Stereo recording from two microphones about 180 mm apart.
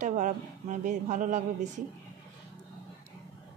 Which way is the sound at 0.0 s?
45° right (ahead or behind).